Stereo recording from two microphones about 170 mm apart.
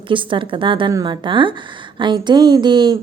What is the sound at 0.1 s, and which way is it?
A woman's voice, 30° right (ahead or behind).